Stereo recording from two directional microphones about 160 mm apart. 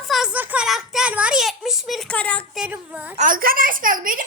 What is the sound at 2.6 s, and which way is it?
Speech, 5° right (ahead or behind).